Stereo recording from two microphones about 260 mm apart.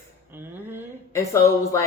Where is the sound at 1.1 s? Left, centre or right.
Centre.